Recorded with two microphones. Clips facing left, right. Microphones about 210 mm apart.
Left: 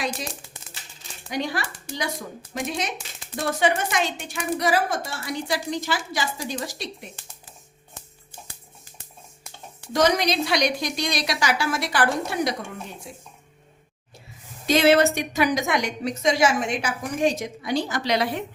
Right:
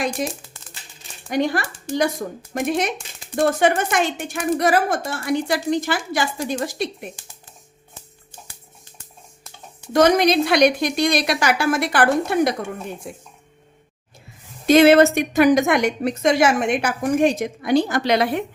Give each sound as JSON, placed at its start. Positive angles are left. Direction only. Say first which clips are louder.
{"t": 1.3, "sound": "a woman's voice", "louder": "right 7 dB", "side_deg": -50}
{"t": 9.9, "sound": "a woman's voice", "louder": "right 6 dB", "side_deg": -55}
{"t": 14.7, "sound": "a woman's voice", "louder": "right 6 dB", "side_deg": -55}